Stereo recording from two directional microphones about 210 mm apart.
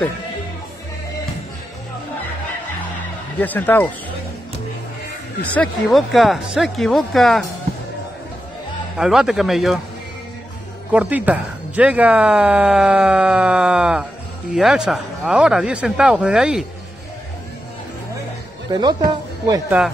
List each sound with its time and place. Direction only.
3.3 s speech: 10° left (ahead or behind)
5.5 s speech: 5° left (ahead or behind)
8.9 s speech: 5° right (ahead or behind)
10.9 s speech: 5° right (ahead or behind)
18.7 s speech: 20° right (ahead or behind)